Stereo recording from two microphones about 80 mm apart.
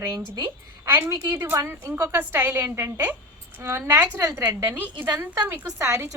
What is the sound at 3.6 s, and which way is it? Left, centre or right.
A woman's voice, right.